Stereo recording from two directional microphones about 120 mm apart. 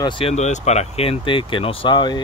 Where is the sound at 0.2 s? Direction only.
65° left (ahead or behind).